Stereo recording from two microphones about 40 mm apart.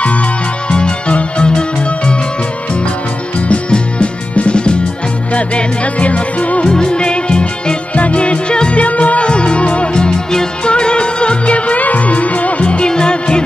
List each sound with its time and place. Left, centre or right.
0.7 s music: left
3.3 s music: left
6.7 s music: left